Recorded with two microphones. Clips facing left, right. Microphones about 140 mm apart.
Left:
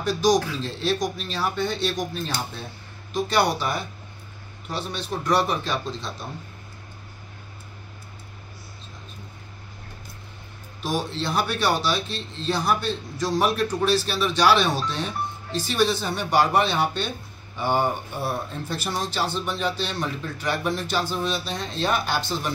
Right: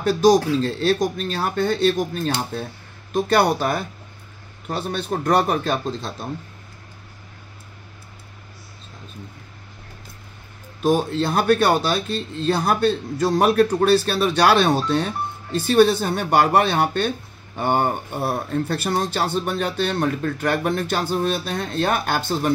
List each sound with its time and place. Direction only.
0.0 s speech: 55° right (ahead or behind)
10.8 s speech: 50° right (ahead or behind)